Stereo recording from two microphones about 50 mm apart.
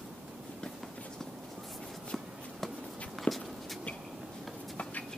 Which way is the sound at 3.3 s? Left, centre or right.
Left.